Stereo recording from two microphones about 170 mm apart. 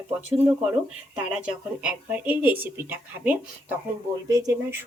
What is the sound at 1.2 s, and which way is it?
Speech, 5° right (ahead or behind).